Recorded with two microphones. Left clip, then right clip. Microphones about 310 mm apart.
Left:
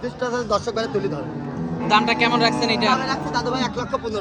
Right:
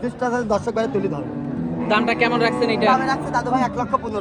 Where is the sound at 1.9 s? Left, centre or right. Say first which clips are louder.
Left 1 dB; centre.